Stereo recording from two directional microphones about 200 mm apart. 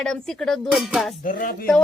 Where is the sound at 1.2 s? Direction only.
40° left (ahead or behind).